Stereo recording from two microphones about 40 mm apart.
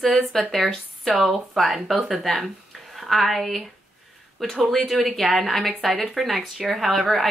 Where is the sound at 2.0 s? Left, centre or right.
Centre.